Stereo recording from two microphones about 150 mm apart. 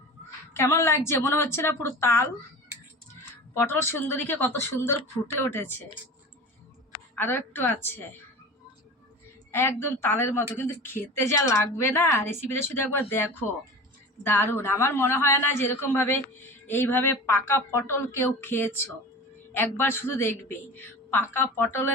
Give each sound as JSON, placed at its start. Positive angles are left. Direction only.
{"t": 0.5, "sound": "speech", "side_deg": 15}
{"t": 3.5, "sound": "speech", "side_deg": 15}
{"t": 7.2, "sound": "speech", "side_deg": 15}
{"t": 9.5, "sound": "speech", "side_deg": 15}
{"t": 14.3, "sound": "speech", "side_deg": 15}